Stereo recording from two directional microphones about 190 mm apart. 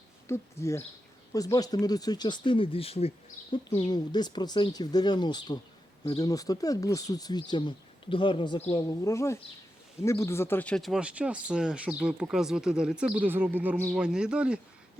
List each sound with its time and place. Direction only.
0.3 s speech: 15° left (ahead or behind)
8.7 s speech: 15° left (ahead or behind); by 14.6 s 5° right (ahead or behind)